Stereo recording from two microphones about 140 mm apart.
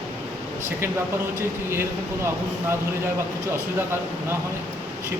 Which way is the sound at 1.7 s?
20° right (ahead or behind).